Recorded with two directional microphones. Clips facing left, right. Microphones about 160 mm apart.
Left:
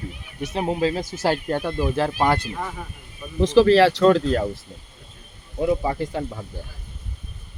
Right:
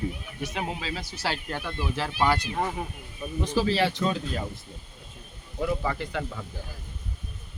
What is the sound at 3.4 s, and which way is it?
Speech, 90° left.